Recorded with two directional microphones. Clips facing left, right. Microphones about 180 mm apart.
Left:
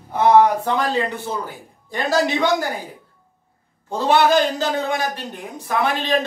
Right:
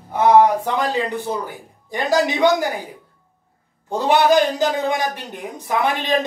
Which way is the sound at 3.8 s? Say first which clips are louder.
Right 1 dB; 15° right (ahead or behind).